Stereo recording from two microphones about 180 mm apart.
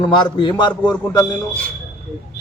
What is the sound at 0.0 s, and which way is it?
A man's voice, 25° left (ahead or behind).